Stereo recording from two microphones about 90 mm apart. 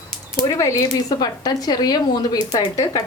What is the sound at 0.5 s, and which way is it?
A woman's voice, 35° left (ahead or behind).